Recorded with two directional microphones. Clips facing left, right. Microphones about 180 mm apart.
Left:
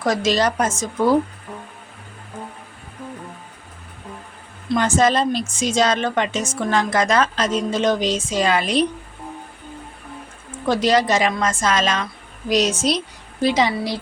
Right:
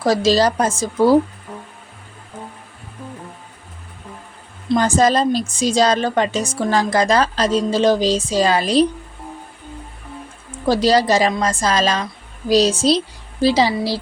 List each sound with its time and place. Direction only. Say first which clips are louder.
0.0 s a woman's voice: right 4 dB; 30° right (ahead or behind)
4.8 s a woman's voice: right 2 dB; 35° right (ahead or behind)
10.7 s a woman's voice: right 3 dB; 35° right (ahead or behind)